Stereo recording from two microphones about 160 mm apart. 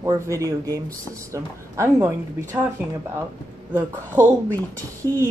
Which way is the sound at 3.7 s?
15° right (ahead or behind).